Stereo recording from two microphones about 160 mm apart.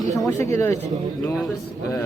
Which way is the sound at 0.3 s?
15° left (ahead or behind).